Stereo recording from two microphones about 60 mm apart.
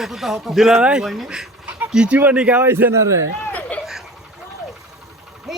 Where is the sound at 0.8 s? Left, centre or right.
Centre.